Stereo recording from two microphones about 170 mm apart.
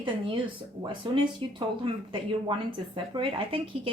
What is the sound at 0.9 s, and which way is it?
Speech, 30° right (ahead or behind).